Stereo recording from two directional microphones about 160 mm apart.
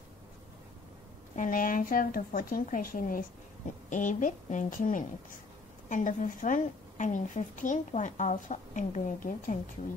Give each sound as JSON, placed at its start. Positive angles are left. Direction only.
{"t": 1.3, "sound": "a woman's voice", "side_deg": 60}